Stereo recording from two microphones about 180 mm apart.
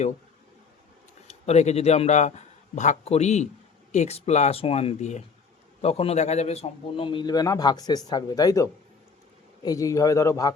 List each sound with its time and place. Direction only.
1.3 s a man's voice: 40° left (ahead or behind); by 10.5 s 20° left (ahead or behind)